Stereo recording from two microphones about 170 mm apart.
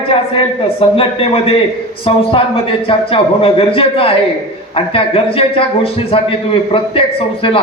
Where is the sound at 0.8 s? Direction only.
35° left (ahead or behind).